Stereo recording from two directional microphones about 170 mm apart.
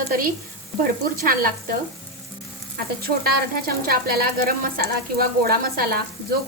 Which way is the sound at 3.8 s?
60° right (ahead or behind).